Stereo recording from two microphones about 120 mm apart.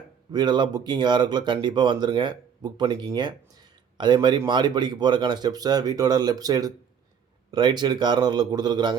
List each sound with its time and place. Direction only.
0.3 s speech: 35° right (ahead or behind)
3.2 s a sound: 35° right (ahead or behind)
4.4 s speech: 40° right (ahead or behind)